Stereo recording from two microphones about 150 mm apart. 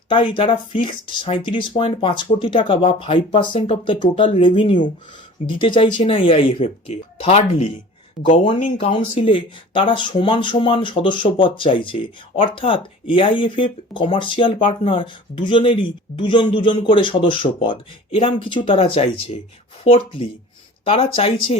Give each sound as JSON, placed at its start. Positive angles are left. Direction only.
{"t": 0.1, "sound": "speech", "side_deg": 35}
{"t": 8.2, "sound": "speech", "side_deg": 0}
{"t": 8.6, "sound": "speech", "side_deg": 55}
{"t": 9.1, "sound": "speech", "side_deg": 35}